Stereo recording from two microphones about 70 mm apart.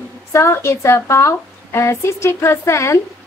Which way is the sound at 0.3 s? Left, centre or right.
Left.